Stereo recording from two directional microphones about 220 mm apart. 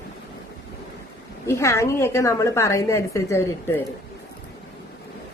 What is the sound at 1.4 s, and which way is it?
A woman's voice, 15° left (ahead or behind).